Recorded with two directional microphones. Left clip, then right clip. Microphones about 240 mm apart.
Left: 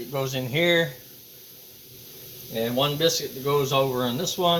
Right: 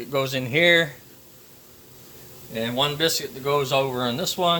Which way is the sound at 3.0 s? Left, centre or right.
Right.